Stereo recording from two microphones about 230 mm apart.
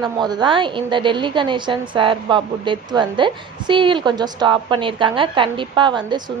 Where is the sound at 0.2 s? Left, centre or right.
Centre.